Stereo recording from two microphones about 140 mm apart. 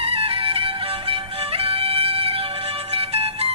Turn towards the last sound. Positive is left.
turn(degrees=-45)  # may be behind; listen again after turning